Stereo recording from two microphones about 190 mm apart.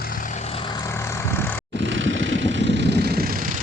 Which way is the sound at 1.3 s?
10° left (ahead or behind).